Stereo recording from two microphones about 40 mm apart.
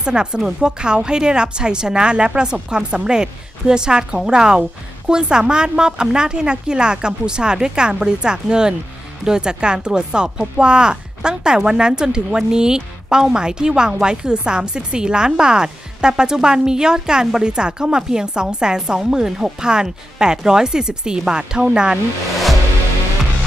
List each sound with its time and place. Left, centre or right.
0.0 s speech: right